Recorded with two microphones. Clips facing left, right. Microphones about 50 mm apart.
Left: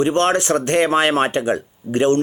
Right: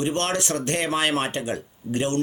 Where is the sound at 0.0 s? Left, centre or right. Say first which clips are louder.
Left 8 dB; left.